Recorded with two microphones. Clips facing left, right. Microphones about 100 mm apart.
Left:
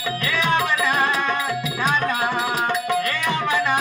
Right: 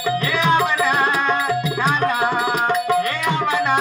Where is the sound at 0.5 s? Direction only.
30° right (ahead or behind).